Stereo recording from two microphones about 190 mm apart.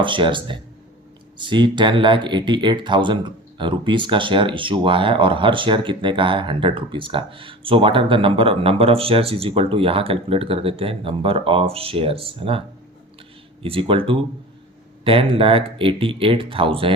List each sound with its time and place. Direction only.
0.0 s speech: 25° right (ahead or behind)